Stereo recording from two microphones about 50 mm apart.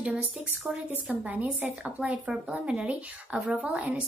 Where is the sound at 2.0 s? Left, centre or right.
Centre.